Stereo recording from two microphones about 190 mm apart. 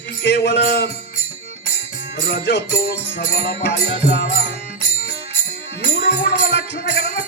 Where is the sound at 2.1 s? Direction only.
65° left (ahead or behind).